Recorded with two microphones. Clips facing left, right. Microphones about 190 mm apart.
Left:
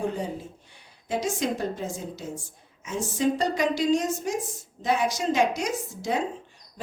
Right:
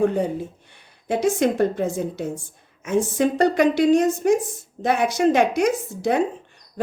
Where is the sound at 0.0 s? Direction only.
60° right (ahead or behind).